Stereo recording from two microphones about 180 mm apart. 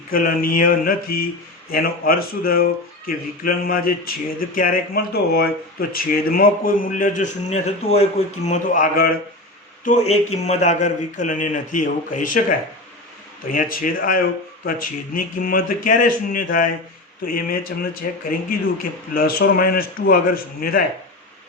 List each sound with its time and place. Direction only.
0.1 s speech: 50° left (ahead or behind)
9.8 s speech: 40° left (ahead or behind)